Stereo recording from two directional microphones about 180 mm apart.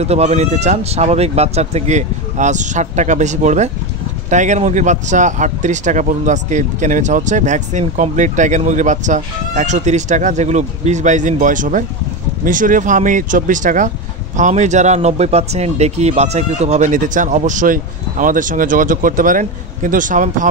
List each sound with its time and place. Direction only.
0.0 s speech: 35° right (ahead or behind)